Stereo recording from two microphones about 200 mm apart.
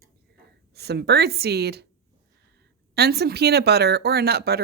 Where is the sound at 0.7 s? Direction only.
55° right (ahead or behind).